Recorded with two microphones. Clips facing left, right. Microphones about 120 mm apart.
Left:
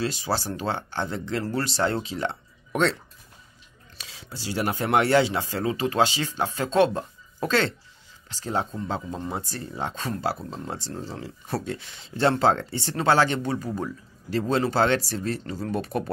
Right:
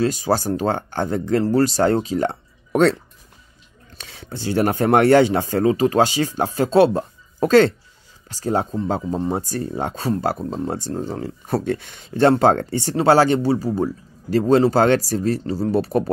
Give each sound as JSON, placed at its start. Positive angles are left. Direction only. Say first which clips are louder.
{"t": 0.0, "sound": "speech", "louder": "right 8 dB", "side_deg": -45}
{"t": 4.0, "sound": "speech", "louder": "right 8 dB", "side_deg": -60}